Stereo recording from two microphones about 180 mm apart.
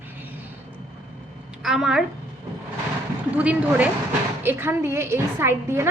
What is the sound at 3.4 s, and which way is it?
A woman's voice, 10° right (ahead or behind).